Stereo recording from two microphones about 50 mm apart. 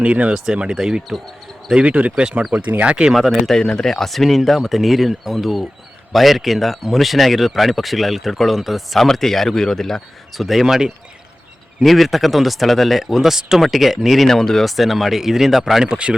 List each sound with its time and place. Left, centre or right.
0.0 s speech: right
2.6 s speech: right
2.8 s speech: right
3.2 s speech: centre
3.6 s speech: centre
10.4 s speech: centre
11.8 s speech: centre
14.3 s speech: centre
15.9 s speech: right